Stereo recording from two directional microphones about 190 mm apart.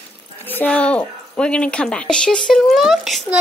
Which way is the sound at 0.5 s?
5° left (ahead or behind).